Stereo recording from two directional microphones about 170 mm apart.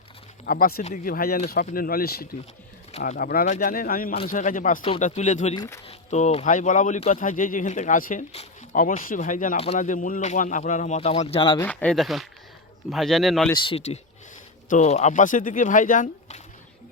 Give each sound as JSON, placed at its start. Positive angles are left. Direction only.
{"t": 0.4, "sound": "speech", "side_deg": 55}
{"t": 3.4, "sound": "speech", "side_deg": 50}
{"t": 5.5, "sound": "speech", "side_deg": 15}
{"t": 5.9, "sound": "speech", "side_deg": 45}
{"t": 11.6, "sound": "speech", "side_deg": 10}
{"t": 13.5, "sound": "speech", "side_deg": 30}